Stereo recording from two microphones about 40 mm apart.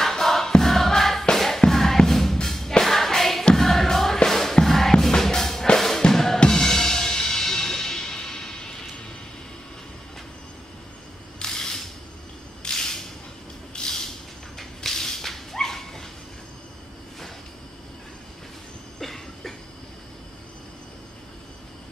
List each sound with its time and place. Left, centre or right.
0.0 s choir: centre
1.3 s music: centre
6.0 s drum kit: centre
6.5 s music: centre
11.3 s a sound: centre
14.6 s dog: centre
18.9 s cough: centre